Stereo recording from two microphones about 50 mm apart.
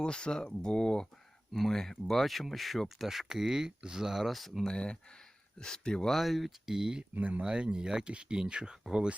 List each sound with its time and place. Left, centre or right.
0.0 s speech: centre
6.1 s speech: centre
7.1 s speech: right
7.4 s speech: centre